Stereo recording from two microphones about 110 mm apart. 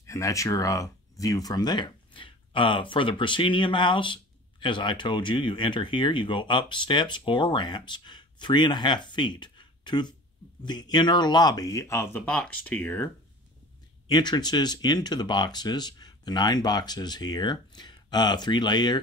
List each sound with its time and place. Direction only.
0.0 s speech: 30° left (ahead or behind)
14.0 s speech: 40° left (ahead or behind)